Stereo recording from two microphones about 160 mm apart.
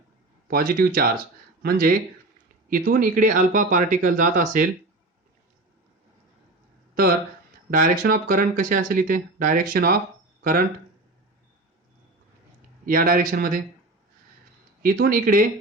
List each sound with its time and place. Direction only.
0.4 s speech: 65° right (ahead or behind)
7.7 s speech: 65° right (ahead or behind)
12.8 s speech: 60° right (ahead or behind)
14.8 s speech: 65° right (ahead or behind)